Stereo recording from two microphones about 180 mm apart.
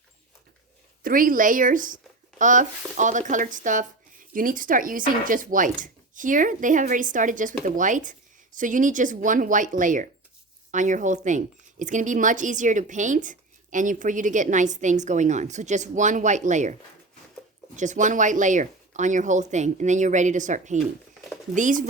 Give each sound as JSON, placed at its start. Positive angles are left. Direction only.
{"t": 1.0, "sound": "a woman's voice", "side_deg": -50}
{"t": 17.7, "sound": "a woman's voice", "side_deg": -45}